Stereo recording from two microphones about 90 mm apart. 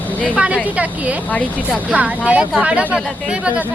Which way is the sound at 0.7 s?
15° right (ahead or behind).